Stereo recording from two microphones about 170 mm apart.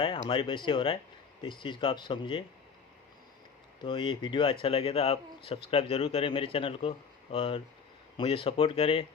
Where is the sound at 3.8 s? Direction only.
30° left (ahead or behind).